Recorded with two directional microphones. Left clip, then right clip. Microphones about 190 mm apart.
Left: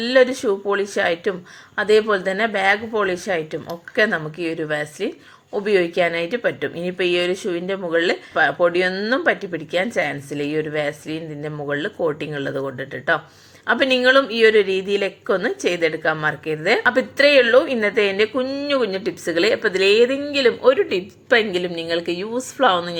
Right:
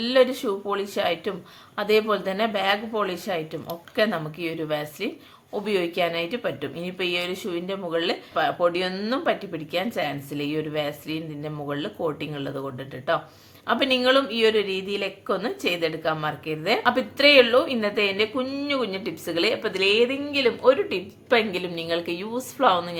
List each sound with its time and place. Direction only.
0.0 s a woman's voice: 15° left (ahead or behind)